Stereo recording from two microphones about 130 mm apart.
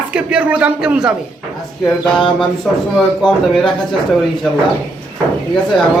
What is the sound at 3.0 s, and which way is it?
Speech, 5° left (ahead or behind).